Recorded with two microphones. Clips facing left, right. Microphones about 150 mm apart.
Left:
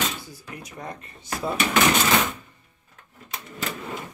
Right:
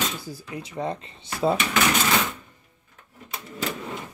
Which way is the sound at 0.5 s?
25° right (ahead or behind).